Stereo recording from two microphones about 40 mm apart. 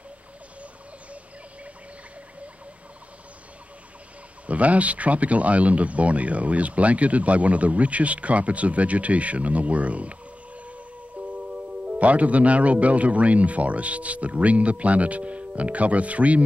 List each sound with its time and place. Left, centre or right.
4.5 s speech: right
11.2 s music: right
12.0 s speech: right